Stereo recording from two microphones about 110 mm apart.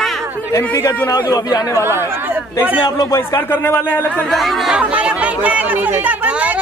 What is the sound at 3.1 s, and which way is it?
Speech, 25° left (ahead or behind).